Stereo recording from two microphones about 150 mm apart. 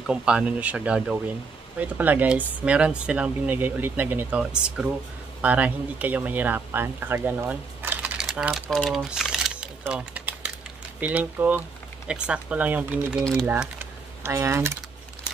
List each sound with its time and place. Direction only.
0.0 s speech: 5° right (ahead or behind)
13.5 s typing: 10° right (ahead or behind)